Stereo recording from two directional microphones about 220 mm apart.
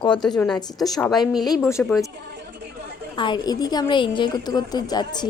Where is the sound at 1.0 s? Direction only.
Centre (ahead or behind).